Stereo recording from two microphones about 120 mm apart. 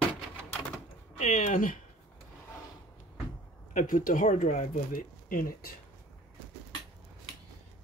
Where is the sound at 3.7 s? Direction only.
90° left.